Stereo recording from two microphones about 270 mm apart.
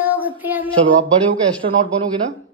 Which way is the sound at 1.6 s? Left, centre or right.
Right.